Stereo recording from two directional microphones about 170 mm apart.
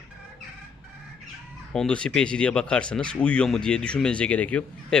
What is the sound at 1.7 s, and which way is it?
Speech, 5° left (ahead or behind).